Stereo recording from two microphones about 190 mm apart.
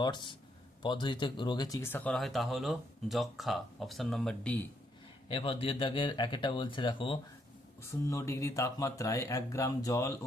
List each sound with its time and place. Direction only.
0.0 s speech: 25° left (ahead or behind); by 4.6 s 5° left (ahead or behind)
5.3 s speech: 30° left (ahead or behind)
7.8 s speech: 15° left (ahead or behind)